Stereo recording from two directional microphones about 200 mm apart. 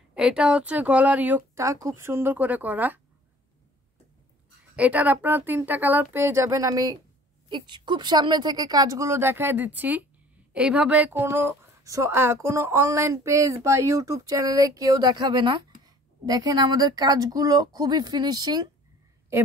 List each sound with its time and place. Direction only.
0.1 s a woman's voice: 5° right (ahead or behind)
4.7 s a woman's voice: 5° right (ahead or behind)